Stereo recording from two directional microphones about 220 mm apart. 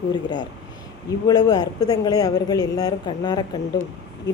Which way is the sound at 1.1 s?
15° left (ahead or behind).